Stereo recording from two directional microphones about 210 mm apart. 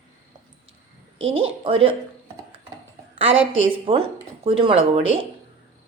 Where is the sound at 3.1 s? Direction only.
65° right (ahead or behind).